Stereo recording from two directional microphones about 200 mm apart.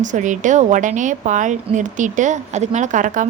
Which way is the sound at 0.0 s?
40° right (ahead or behind).